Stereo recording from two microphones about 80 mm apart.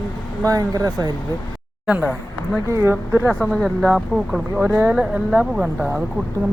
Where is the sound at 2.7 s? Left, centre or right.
Right.